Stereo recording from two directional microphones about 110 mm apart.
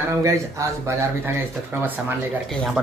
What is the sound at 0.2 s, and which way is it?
Speech, 30° right (ahead or behind).